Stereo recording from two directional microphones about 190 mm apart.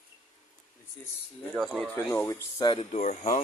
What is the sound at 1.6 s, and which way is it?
Speech, centre (ahead or behind).